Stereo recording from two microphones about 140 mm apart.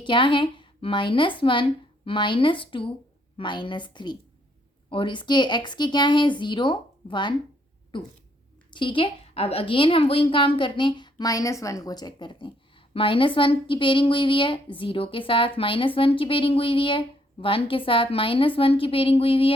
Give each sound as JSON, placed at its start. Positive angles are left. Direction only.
{"t": 0.0, "sound": "a woman's voice", "side_deg": 35}